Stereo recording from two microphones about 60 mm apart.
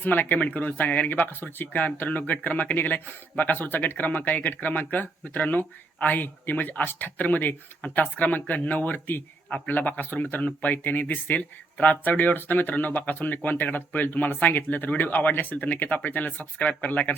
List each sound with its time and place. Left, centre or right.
0.0 s speech: left